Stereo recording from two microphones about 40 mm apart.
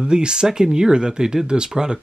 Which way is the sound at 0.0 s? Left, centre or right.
Right.